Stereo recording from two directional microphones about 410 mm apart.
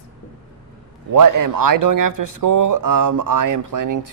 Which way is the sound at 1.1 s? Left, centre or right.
Right.